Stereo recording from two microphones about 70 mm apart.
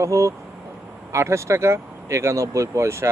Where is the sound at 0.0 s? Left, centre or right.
Right.